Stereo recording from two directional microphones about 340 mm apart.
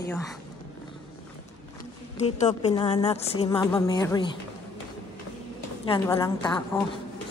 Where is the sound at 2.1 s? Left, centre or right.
Centre.